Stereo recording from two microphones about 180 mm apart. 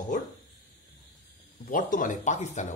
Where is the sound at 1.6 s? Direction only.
50° left (ahead or behind).